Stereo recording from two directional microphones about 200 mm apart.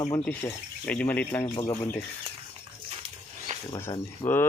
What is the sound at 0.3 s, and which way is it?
Speech, 5° left (ahead or behind).